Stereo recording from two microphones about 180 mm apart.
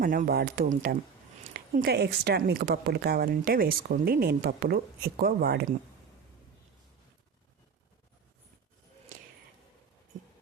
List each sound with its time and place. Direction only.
0.0 s a woman's voice: 55° right (ahead or behind)